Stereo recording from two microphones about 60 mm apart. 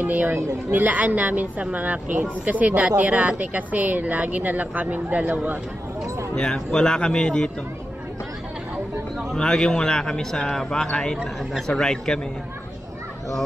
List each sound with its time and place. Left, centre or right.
0.0 s speech: right
6.3 s a man's voice: centre
9.4 s a man's voice: centre